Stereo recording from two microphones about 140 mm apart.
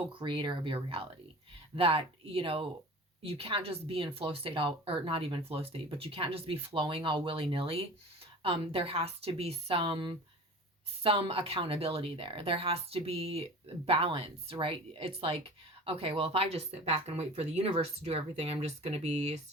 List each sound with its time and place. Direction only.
0.0 s speech: 35° right (ahead or behind); by 19.4 s 50° right (ahead or behind)